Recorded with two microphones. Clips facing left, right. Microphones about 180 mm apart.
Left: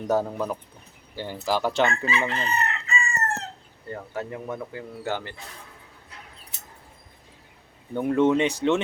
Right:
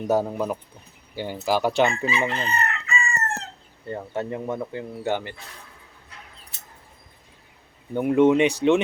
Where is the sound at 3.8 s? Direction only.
25° right (ahead or behind).